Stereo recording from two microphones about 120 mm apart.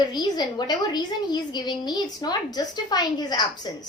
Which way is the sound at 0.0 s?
35° left (ahead or behind).